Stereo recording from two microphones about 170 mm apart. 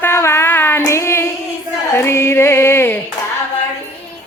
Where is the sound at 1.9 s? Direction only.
15° left (ahead or behind).